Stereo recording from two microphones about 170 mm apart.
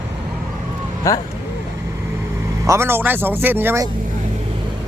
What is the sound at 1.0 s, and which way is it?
Speech, 20° left (ahead or behind).